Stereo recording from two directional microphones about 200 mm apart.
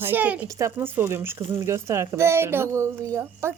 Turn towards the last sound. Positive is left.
turn(degrees=-15)  # may be behind; listen again after turning